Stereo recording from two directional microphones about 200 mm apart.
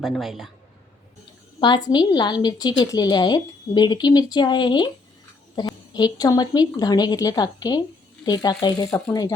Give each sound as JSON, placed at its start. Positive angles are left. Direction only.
{"t": 0.0, "sound": "a man's voice", "side_deg": 0}
{"t": 1.6, "sound": "speech", "side_deg": 20}